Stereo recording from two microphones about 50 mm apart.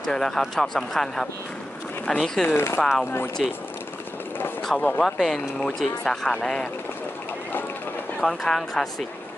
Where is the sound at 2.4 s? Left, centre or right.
Left.